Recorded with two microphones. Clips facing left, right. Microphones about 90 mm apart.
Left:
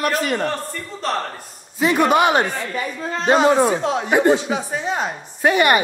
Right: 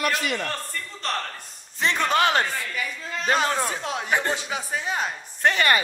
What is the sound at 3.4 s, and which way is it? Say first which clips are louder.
A man's voice: left 10 dB; 15° left (ahead or behind).